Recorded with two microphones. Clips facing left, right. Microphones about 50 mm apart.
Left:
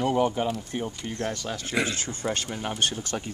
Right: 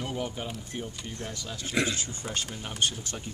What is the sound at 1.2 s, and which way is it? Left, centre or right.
Speech, left.